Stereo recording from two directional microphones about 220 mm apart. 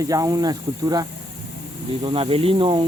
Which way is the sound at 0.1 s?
15° right (ahead or behind).